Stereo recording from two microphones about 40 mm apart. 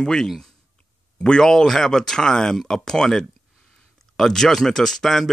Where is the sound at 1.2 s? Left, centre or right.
Centre.